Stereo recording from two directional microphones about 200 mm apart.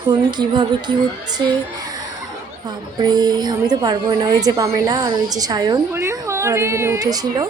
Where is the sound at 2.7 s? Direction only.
20° right (ahead or behind).